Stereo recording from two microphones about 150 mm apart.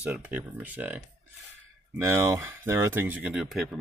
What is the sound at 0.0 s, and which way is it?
Speech, 10° right (ahead or behind).